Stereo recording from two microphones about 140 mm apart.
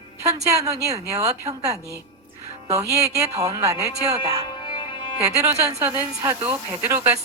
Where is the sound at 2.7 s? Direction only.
25° right (ahead or behind).